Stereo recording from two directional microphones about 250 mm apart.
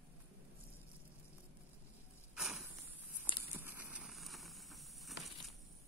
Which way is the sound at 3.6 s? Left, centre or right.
Centre.